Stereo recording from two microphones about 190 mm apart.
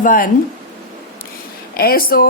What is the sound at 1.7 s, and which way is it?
Speech, 55° left (ahead or behind).